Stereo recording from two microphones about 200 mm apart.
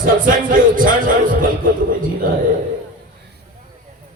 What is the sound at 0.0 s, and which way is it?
Music, 45° right (ahead or behind).